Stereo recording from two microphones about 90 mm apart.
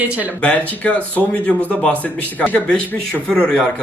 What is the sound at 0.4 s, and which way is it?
Speech, 15° left (ahead or behind).